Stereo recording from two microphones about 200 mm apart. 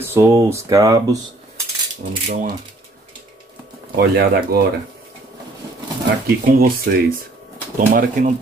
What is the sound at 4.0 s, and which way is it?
Speech, 50° right (ahead or behind).